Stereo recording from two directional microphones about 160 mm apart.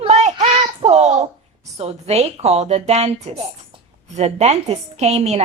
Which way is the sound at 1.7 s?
40° right (ahead or behind).